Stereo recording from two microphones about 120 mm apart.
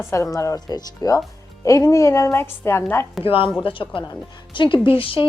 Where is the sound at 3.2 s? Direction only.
50° left (ahead or behind).